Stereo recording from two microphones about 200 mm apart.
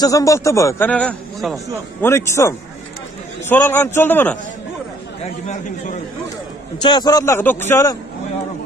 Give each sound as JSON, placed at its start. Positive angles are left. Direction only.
{"t": 0.0, "sound": "a man's voice", "side_deg": 15}
{"t": 6.8, "sound": "a man's voice", "side_deg": 20}